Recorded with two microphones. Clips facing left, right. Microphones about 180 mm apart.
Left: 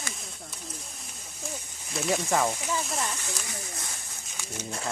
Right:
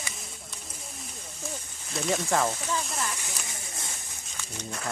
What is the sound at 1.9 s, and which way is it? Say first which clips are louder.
Speech: even; centre (ahead or behind).